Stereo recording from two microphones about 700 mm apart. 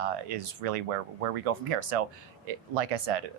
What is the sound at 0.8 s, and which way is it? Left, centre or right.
Speech, right.